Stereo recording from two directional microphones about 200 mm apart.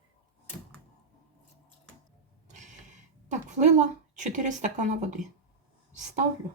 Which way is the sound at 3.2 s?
35° right (ahead or behind).